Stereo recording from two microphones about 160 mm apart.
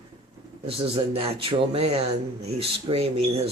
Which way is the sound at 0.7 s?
35° right (ahead or behind).